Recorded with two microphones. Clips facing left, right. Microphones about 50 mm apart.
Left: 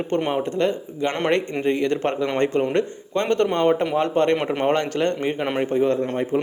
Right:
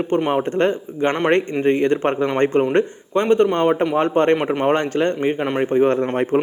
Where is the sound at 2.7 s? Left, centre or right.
Centre.